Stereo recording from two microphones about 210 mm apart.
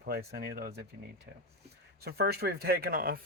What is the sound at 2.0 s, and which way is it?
Speech, 50° right (ahead or behind).